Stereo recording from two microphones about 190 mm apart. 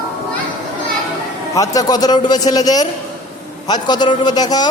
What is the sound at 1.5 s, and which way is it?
Speech, 20° left (ahead or behind).